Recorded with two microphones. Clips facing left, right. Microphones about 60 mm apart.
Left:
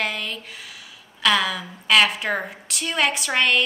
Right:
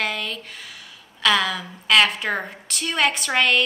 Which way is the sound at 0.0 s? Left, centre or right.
Centre.